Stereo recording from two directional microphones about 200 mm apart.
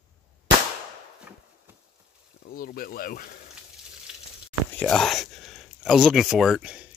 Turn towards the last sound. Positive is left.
turn(degrees=-5)  # may be behind; listen again after turning